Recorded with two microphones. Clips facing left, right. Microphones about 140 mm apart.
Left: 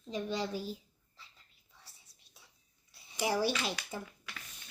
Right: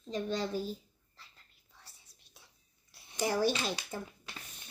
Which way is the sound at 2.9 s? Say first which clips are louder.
Right 1 dB; 5° left (ahead or behind).